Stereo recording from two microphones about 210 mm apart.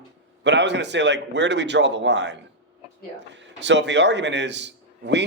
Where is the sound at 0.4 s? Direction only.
55° right (ahead or behind).